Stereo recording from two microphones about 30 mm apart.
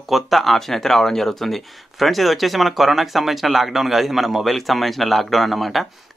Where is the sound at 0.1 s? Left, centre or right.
Centre.